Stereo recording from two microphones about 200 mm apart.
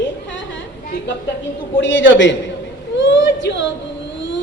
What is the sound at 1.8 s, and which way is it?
Speech, 65° left (ahead or behind).